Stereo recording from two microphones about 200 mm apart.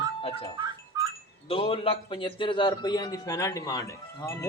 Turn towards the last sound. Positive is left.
turn(degrees=15)  # may be behind; listen again after turning